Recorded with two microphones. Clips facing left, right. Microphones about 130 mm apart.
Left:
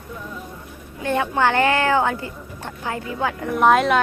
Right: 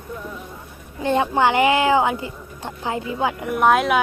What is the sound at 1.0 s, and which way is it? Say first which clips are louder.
A woman's voice: right 2 dB; 20° right (ahead or behind).